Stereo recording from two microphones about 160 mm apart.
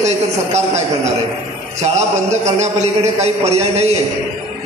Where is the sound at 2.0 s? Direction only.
45° right (ahead or behind).